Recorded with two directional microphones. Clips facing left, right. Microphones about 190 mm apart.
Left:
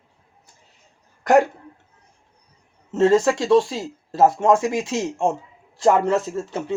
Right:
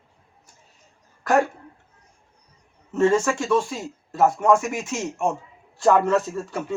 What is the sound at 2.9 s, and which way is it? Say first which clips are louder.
Speech: left 3 dB; 20° left (ahead or behind).